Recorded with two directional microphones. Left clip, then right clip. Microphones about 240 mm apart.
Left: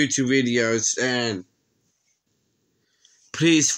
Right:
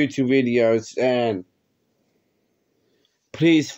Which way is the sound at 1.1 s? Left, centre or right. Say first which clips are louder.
Right 4 dB; left.